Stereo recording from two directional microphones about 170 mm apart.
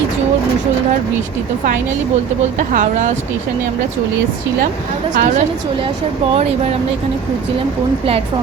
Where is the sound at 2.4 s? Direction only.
45° right (ahead or behind).